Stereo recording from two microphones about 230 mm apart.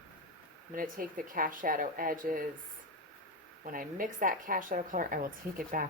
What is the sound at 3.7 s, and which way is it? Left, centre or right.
A woman's voice, right.